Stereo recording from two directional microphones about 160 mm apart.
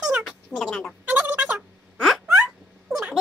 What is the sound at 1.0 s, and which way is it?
Turkey, 10° right (ahead or behind).